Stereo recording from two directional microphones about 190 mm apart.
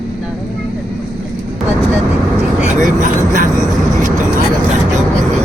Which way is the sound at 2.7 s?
40° right (ahead or behind).